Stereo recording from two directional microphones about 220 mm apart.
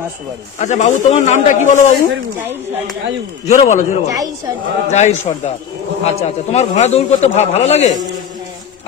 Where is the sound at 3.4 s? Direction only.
35° left (ahead or behind).